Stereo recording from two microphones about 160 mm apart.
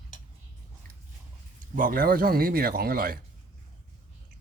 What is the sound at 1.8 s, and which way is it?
Speech, 60° right (ahead or behind).